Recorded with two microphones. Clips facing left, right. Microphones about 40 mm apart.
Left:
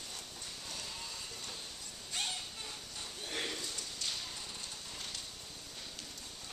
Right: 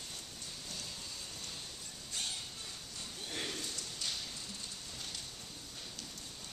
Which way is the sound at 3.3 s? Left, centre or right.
Centre.